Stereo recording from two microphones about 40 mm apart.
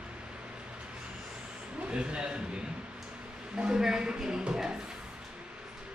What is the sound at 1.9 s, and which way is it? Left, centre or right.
Speech, right.